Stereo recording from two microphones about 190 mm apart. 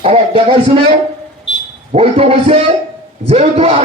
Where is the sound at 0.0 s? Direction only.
30° right (ahead or behind).